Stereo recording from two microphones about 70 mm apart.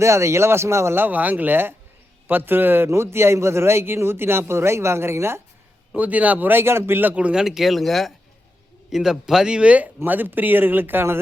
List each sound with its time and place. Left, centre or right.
0.0 s a man's voice: right
6.0 s speech: right
7.3 s a man's voice: centre; by 11.2 s right